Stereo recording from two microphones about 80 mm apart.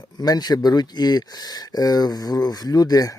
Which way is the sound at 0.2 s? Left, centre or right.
Left.